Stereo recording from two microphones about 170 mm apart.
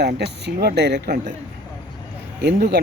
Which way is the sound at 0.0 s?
75° right (ahead or behind).